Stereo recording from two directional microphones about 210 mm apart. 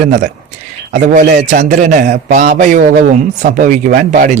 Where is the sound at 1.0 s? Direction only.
35° right (ahead or behind).